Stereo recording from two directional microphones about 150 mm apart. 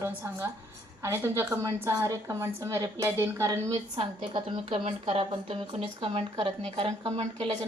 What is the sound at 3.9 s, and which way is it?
A woman's voice, 35° right (ahead or behind).